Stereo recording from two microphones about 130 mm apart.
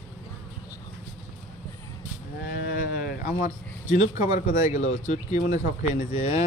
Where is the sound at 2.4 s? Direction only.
90° left; by 6.4 s 60° left (ahead or behind).